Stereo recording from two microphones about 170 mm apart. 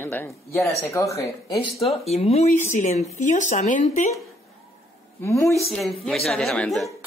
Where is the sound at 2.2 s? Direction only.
40° left (ahead or behind).